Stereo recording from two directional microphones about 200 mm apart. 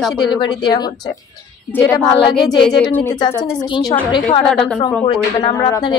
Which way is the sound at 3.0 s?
25° left (ahead or behind).